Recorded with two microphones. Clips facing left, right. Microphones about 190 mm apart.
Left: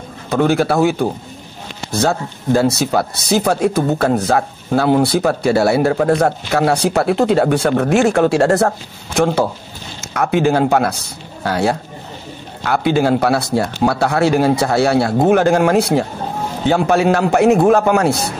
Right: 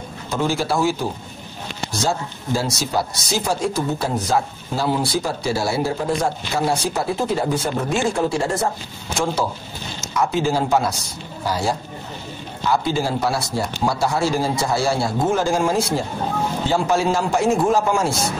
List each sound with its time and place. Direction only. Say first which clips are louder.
0.3 s speech: left 7 dB; 60° left (ahead or behind)